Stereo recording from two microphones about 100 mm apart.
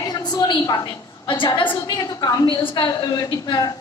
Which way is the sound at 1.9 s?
40° left (ahead or behind).